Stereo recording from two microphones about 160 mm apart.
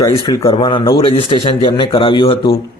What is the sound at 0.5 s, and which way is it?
A man's voice, 30° left (ahead or behind).